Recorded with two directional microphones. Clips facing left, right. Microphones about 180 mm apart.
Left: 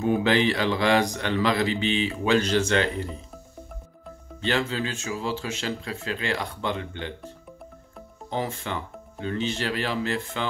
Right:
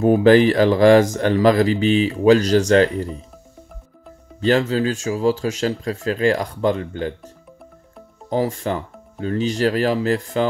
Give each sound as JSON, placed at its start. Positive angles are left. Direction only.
{"t": 0.0, "sound": "speech", "side_deg": -45}
{"t": 4.4, "sound": "speech", "side_deg": -40}
{"t": 8.3, "sound": "speech", "side_deg": -40}